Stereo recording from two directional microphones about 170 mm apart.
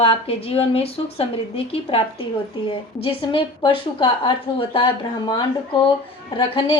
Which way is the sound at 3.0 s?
30° left (ahead or behind).